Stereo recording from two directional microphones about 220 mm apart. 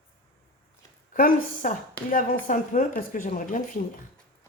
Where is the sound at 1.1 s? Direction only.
40° left (ahead or behind).